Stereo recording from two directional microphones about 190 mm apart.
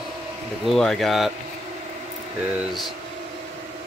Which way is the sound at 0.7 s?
Centre (ahead or behind).